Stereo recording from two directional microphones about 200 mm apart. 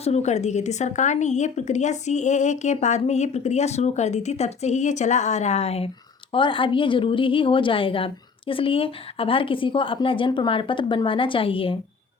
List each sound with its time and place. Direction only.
0.0 s a woman's voice: 35° left (ahead or behind)